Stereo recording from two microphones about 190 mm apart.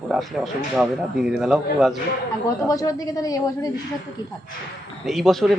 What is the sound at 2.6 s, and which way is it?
A woman's voice, 20° left (ahead or behind).